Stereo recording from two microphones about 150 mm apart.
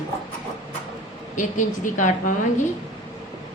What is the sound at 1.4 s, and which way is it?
Speech, 60° left (ahead or behind).